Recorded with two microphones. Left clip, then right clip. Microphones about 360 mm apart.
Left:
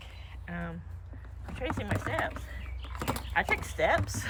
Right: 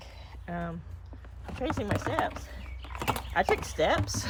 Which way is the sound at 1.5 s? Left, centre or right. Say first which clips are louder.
Right 3 dB; centre.